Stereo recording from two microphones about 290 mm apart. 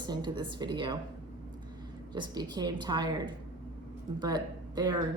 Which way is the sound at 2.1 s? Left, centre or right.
Centre.